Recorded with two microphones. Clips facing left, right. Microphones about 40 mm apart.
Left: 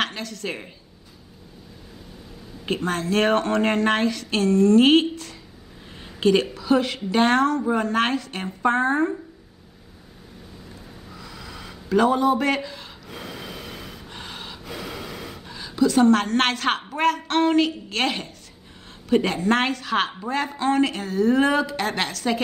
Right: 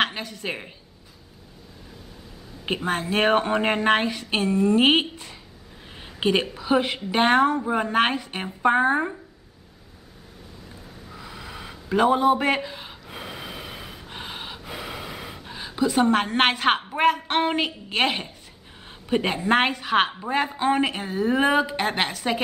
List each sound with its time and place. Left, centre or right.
0.0 s a woman's voice: centre
2.6 s a woman's voice: centre
6.0 s a sound: centre
6.4 s a woman's voice: centre
11.1 s a sound: centre
16.9 s a woman's voice: centre